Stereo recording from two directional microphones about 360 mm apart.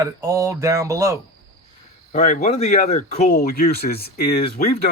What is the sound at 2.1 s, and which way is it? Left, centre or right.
Speech, left.